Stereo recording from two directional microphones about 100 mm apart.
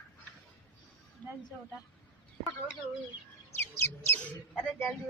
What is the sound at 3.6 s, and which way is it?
Bird, 20° left (ahead or behind).